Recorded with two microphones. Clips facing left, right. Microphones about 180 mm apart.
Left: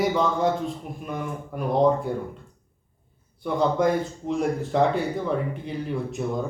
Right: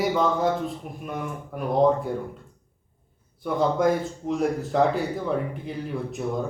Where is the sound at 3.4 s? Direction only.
Centre (ahead or behind).